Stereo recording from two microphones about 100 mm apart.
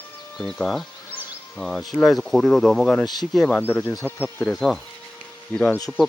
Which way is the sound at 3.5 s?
20° left (ahead or behind).